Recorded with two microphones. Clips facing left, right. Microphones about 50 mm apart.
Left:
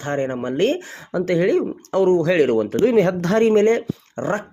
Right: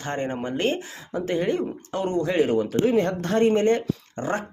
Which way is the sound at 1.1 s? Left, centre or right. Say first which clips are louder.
Left 6 dB; left.